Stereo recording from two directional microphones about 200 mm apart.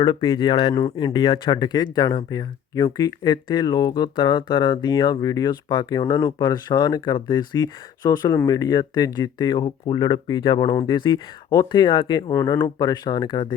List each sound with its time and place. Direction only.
0.0 s speech: 25° left (ahead or behind)